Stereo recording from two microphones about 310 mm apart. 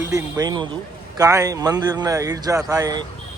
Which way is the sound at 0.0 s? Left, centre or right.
Centre.